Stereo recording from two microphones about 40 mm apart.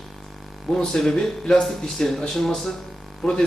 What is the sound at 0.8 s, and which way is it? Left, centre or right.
Speech, centre.